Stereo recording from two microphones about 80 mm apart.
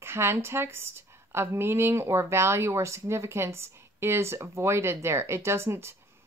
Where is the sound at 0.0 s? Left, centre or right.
Right.